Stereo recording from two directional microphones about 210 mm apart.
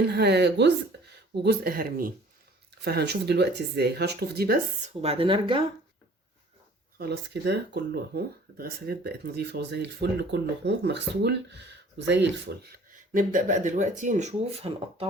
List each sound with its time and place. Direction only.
0.1 s speech: 50° right (ahead or behind)
5.0 s speech: 25° right (ahead or behind)
7.0 s speech: 50° right (ahead or behind); by 15.0 s 30° right (ahead or behind)